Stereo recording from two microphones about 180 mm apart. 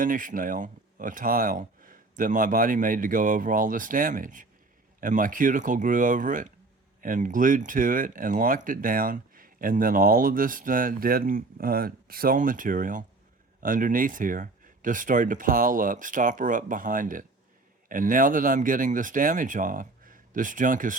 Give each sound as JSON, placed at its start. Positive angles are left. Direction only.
{"t": 0.0, "sound": "speech", "side_deg": -50}